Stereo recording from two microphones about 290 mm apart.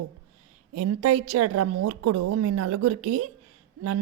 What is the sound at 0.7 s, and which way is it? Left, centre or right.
A woman's voice, right.